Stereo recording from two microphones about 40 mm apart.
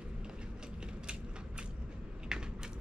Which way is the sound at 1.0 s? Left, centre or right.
Right.